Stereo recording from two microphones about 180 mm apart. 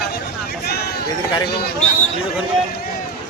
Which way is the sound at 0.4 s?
60° left (ahead or behind).